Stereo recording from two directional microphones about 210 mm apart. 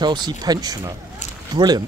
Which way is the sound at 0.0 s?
20° right (ahead or behind).